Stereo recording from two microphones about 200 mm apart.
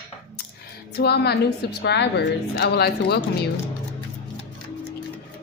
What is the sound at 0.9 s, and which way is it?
A woman's voice, 55° left (ahead or behind).